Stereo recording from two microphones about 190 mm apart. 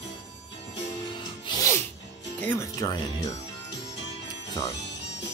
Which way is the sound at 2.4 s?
15° left (ahead or behind).